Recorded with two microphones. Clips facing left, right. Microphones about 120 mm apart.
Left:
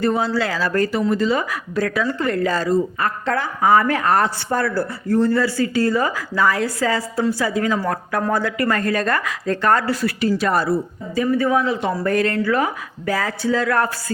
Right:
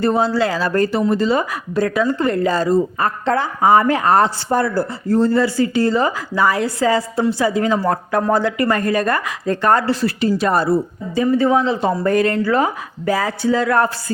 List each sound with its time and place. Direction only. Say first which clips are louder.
0.0 s speech: right 3 dB; 30° right (ahead or behind)
5.0 s speech: right 2 dB; 30° right (ahead or behind)